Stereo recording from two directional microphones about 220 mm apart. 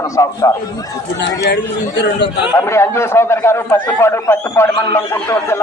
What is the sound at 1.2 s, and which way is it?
Speech, 50° left (ahead or behind).